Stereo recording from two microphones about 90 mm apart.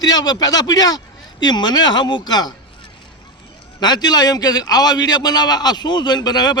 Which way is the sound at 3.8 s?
50° left (ahead or behind).